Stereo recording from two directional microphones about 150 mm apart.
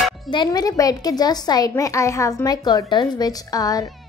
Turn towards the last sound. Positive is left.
turn(degrees=25)  # may be behind; listen again after turning